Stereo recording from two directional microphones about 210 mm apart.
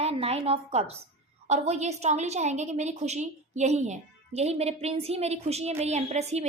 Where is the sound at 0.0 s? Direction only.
30° right (ahead or behind).